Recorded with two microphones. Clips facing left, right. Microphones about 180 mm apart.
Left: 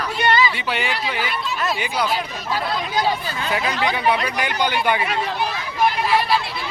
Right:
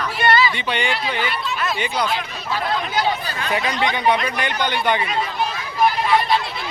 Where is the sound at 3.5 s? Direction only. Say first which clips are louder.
Right 1 dB; 5° left (ahead or behind).